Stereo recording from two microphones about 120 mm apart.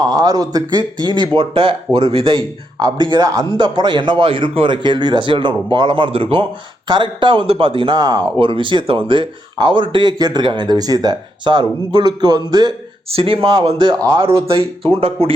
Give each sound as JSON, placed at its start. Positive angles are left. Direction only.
{"t": 0.0, "sound": "speech", "side_deg": -35}
{"t": 6.8, "sound": "speech", "side_deg": -40}
{"t": 13.1, "sound": "speech", "side_deg": -50}